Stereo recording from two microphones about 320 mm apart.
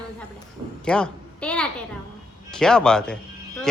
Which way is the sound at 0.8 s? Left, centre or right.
Centre.